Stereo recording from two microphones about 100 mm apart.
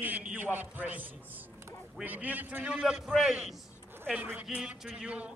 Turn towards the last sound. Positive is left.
turn(degrees=-10)  # may be behind; listen again after turning